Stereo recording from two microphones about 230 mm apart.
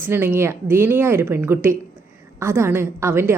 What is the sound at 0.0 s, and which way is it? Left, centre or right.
A woman's voice, centre.